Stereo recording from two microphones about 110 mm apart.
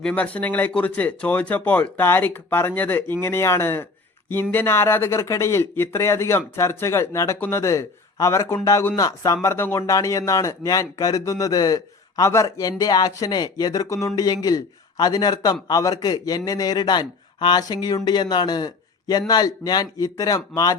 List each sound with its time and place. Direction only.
0.0 s a man's voice: 15° left (ahead or behind); by 20.7 s 35° left (ahead or behind)